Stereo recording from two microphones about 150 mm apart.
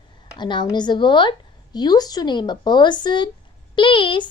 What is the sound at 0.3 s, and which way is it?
A woman's voice, 30° left (ahead or behind).